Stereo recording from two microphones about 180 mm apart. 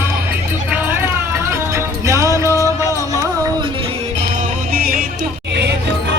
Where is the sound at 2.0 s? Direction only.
15° right (ahead or behind).